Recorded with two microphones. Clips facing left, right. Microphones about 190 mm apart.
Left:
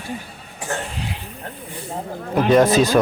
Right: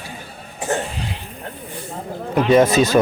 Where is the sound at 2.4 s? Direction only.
Centre (ahead or behind).